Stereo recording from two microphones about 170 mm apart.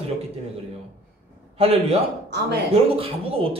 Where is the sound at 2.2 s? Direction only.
75° right (ahead or behind).